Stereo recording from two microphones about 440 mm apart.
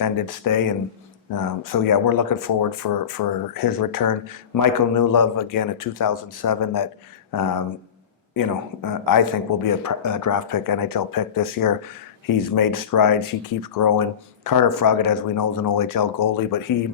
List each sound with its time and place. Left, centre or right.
0.0 s speech: left
7.3 s a sound: left
8.3 s speech: left